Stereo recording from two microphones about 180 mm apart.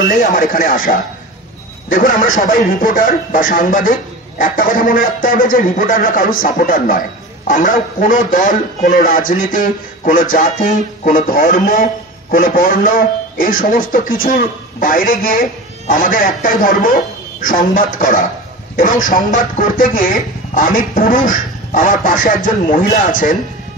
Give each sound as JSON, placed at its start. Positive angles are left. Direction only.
{"t": 0.1, "sound": "speech", "side_deg": 50}